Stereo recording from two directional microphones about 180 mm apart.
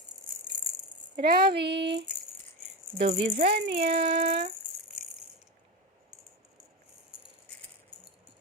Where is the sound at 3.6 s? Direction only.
65° right (ahead or behind).